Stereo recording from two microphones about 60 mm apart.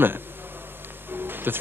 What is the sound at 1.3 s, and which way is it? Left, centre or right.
Music, right.